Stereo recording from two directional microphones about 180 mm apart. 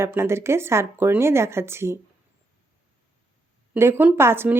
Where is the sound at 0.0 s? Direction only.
15° right (ahead or behind).